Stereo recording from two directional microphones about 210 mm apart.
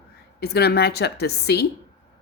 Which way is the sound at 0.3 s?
50° left (ahead or behind).